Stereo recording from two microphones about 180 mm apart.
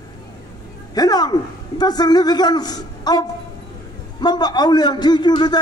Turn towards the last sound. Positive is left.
turn(degrees=25)  # may be behind; listen again after turning